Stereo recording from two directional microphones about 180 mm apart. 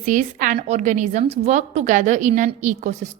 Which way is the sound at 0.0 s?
45° right (ahead or behind).